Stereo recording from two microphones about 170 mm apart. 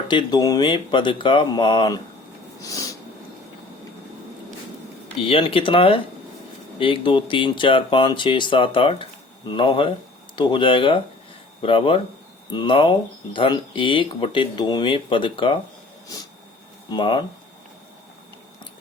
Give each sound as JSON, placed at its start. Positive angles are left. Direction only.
{"t": 0.1, "sound": "speech", "side_deg": 25}
{"t": 2.6, "sound": "snort", "side_deg": 20}
{"t": 5.2, "sound": "speech", "side_deg": 30}
{"t": 16.9, "sound": "speech", "side_deg": 25}